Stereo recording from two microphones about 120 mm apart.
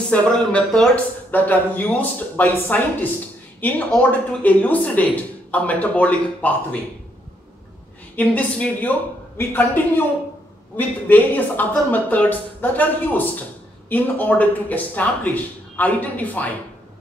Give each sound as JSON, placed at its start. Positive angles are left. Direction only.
{"t": 0.1, "sound": "speech", "side_deg": 10}
{"t": 8.2, "sound": "speech", "side_deg": 10}